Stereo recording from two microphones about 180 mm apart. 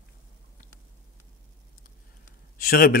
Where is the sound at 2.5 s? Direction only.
50° left (ahead or behind).